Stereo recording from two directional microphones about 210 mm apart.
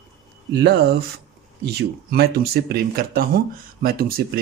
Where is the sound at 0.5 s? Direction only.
55° right (ahead or behind).